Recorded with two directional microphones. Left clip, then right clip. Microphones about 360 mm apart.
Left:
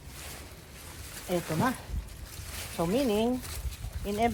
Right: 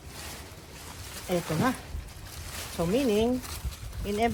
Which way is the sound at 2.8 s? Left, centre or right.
Centre.